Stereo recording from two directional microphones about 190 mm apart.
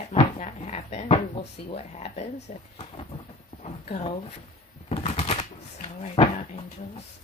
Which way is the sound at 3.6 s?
35° left (ahead or behind).